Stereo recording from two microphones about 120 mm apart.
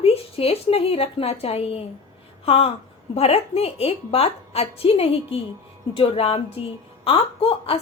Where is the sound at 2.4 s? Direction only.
55° left (ahead or behind).